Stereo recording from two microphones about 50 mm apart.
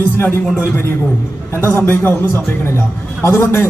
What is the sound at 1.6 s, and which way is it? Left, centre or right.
Speech, left.